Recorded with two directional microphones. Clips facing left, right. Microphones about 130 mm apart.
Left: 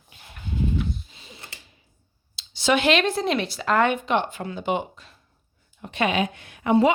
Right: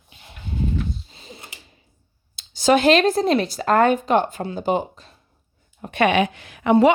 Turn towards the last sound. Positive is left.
turn(degrees=-90)